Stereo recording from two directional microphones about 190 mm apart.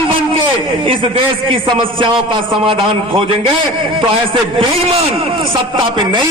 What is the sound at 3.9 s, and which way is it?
A man's voice, 25° right (ahead or behind).